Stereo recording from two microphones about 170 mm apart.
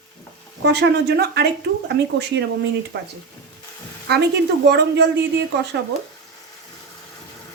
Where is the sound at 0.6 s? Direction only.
80° right.